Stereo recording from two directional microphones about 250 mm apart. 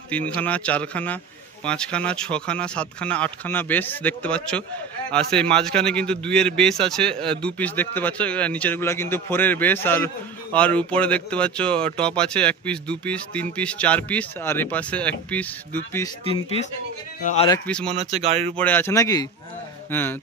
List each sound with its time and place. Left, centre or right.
0.1 s speech: centre
17.2 s speech: left
17.5 s speech: centre
17.8 s speech: right
18.6 s speech: centre